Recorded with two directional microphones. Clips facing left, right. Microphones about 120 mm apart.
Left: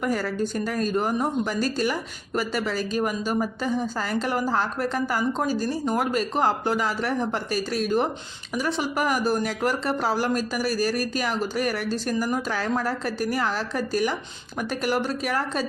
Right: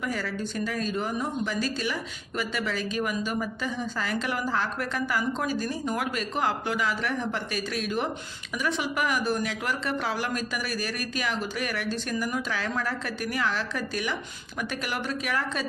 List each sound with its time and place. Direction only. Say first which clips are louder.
0.0 s speech: left 6 dB; 45° left (ahead or behind)